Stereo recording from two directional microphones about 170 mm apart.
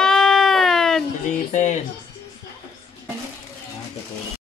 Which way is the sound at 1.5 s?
45° left (ahead or behind).